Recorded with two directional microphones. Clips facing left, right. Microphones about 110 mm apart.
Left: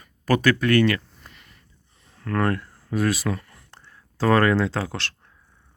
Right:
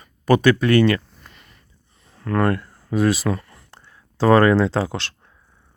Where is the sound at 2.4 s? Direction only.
5° right (ahead or behind).